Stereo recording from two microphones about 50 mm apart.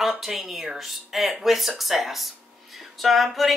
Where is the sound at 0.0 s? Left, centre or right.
Centre.